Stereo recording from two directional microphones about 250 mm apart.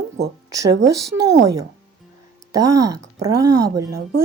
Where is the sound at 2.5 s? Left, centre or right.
Centre.